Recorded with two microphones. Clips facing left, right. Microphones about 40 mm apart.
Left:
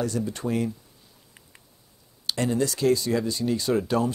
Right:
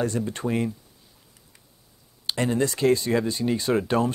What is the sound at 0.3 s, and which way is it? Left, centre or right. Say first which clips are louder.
Speech: right 1 dB; right.